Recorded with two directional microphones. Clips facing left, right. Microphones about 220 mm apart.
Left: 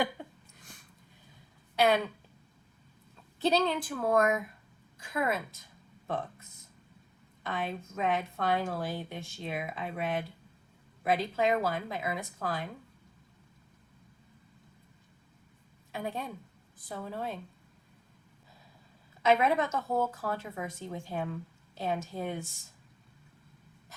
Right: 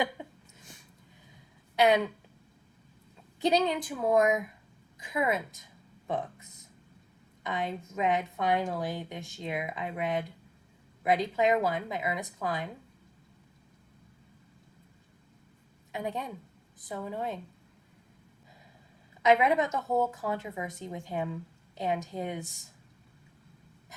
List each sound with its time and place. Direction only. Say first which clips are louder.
0.0 s a sound: even; 20° right (ahead or behind)
1.7 s speech: right 2 dB; 20° right (ahead or behind)
3.4 s a woman's voice: right 1 dB; 15° right (ahead or behind)
15.9 s a woman's voice: right 1 dB; 20° right (ahead or behind)
19.2 s a woman's voice: right 2 dB; 15° right (ahead or behind)